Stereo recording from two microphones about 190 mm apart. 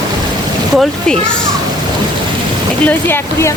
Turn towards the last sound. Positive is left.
turn(degrees=10)  # may be behind; listen again after turning